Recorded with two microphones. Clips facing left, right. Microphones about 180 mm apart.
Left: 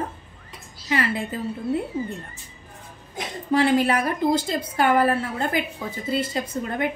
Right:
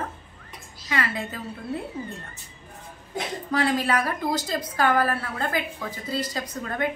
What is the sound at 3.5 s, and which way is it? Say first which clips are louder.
A woman's voice: left 5 dB; 25° left (ahead or behind).